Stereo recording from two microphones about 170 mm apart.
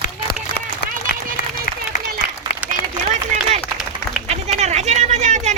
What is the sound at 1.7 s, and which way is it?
Applause, 55° left (ahead or behind).